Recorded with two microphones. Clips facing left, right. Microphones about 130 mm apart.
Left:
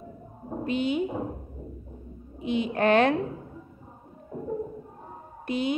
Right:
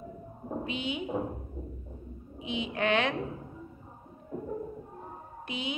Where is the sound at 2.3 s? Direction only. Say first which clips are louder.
Left 7 dB; 50° left (ahead or behind).